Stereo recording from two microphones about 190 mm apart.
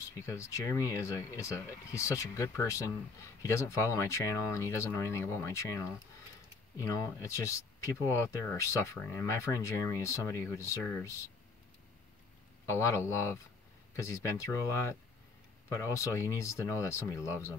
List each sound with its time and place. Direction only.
0.0 s speech: 15° left (ahead or behind)
12.6 s speech: 15° left (ahead or behind)